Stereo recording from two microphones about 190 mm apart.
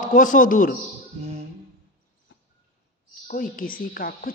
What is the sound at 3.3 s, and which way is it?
A man's voice, 45° left (ahead or behind).